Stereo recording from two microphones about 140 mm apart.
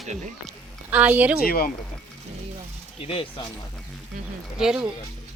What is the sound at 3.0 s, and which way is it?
Speech, 40° left (ahead or behind).